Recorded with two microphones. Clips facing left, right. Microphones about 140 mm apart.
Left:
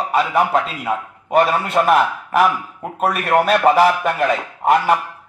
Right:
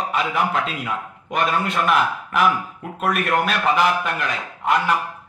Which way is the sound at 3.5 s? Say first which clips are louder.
Left 9 dB; 50° left (ahead or behind).